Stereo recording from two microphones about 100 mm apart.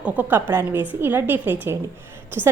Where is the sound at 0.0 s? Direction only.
20° right (ahead or behind).